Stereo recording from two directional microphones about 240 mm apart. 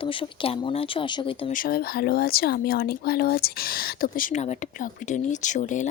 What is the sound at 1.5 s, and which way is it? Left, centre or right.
Speech, left.